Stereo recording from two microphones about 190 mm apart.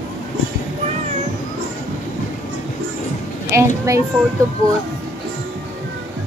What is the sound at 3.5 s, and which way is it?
Speech, 15° right (ahead or behind).